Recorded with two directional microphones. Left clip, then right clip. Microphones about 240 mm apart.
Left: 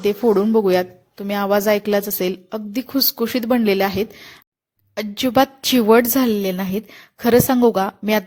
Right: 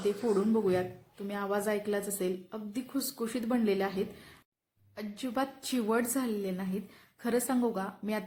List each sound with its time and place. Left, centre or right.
0.3 s a woman's voice: left